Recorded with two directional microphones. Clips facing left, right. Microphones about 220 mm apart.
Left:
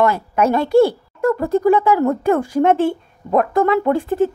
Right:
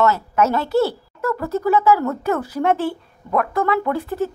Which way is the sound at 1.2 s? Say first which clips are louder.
Left 6 dB; 30° left (ahead or behind).